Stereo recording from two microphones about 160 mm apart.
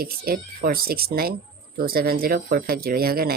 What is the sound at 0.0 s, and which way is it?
Speech, 70° right (ahead or behind).